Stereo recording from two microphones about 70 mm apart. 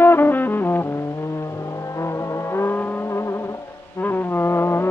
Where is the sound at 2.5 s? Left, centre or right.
Left.